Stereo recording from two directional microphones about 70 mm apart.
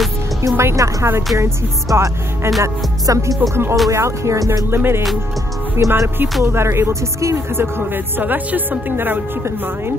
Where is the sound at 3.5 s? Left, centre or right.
Right.